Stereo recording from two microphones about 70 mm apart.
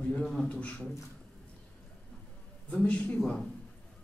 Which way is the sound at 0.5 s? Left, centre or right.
Centre.